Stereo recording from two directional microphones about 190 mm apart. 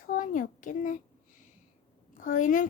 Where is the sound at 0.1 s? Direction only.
45° left (ahead or behind).